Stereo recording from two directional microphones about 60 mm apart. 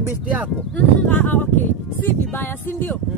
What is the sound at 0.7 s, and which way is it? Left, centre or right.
Speech, left.